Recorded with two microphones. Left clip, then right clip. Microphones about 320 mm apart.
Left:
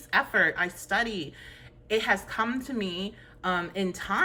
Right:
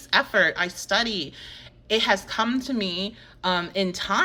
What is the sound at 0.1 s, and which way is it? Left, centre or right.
A woman's voice, centre.